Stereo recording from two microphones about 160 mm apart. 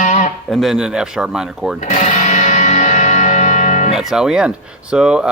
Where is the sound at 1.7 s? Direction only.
50° left (ahead or behind).